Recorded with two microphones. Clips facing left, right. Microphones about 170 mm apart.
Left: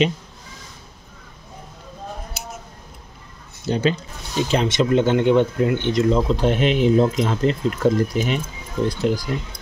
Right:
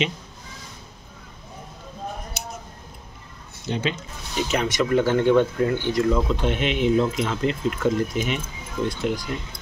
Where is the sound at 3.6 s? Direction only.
40° left (ahead or behind).